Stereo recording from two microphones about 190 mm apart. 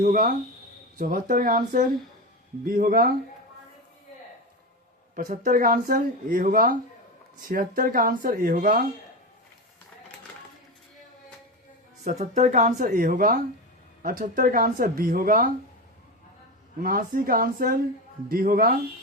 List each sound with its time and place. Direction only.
0.0 s speech: 45° right (ahead or behind)
5.1 s speech: 45° right (ahead or behind)
12.0 s speech: 40° right (ahead or behind)
16.8 s speech: 50° right (ahead or behind)